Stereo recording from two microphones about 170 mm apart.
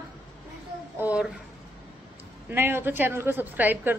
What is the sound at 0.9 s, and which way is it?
Speech, 10° right (ahead or behind).